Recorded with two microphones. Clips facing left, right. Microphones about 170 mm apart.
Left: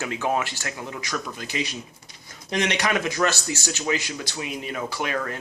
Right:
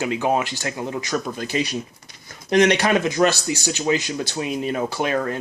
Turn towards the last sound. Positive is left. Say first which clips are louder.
# right 5 dB
turn(degrees=-35)  # may be behind; listen again after turning